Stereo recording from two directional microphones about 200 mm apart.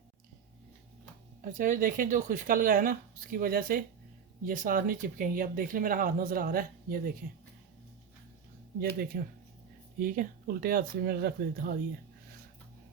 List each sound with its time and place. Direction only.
1.4 s speech: 40° right (ahead or behind)
8.8 s speech: 50° right (ahead or behind)